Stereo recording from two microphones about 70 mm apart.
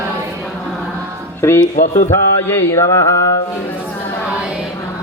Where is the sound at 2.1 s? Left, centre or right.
Left.